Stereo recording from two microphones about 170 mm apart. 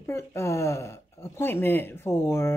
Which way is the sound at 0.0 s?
15° left (ahead or behind).